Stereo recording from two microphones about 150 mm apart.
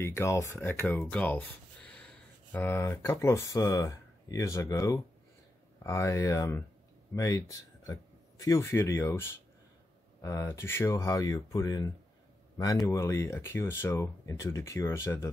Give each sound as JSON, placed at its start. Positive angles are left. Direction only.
{"t": 0.0, "sound": "speech", "side_deg": 20}
{"t": 10.2, "sound": "speech", "side_deg": 20}